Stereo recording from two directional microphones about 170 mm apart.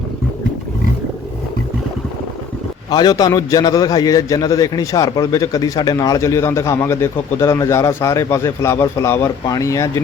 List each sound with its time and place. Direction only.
2.9 s a man's voice: 25° left (ahead or behind)